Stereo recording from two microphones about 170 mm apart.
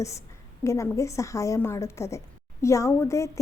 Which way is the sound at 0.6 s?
15° left (ahead or behind).